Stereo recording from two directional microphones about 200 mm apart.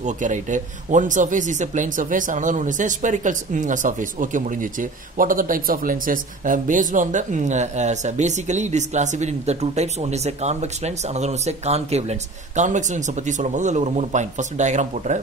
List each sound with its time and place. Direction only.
0.0 s speech: 40° right (ahead or behind)